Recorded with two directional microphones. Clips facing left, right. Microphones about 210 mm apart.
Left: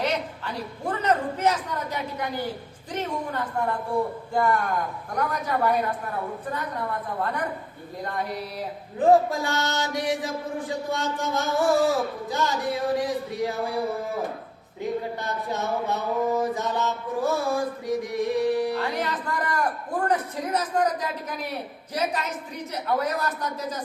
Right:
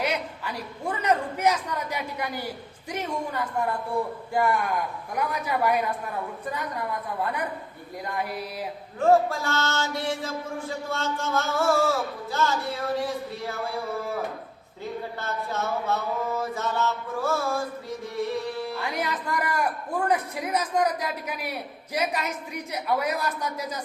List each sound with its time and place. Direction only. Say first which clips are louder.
0.0 s a man's voice: left 1 dB; 10° right (ahead or behind)
4.4 s a man's voice: left 1 dB; 10° right (ahead or behind)
8.0 s a man's voice: left 1 dB; 10° right (ahead or behind)
9.0 s a sound: left 2 dB; 15° left (ahead or behind)
15.2 s a sound: left 1 dB; 15° left (ahead or behind)
18.8 s a man's voice: left 2 dB; 10° right (ahead or behind)